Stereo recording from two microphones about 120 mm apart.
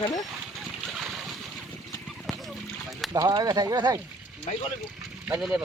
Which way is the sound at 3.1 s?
35° right (ahead or behind).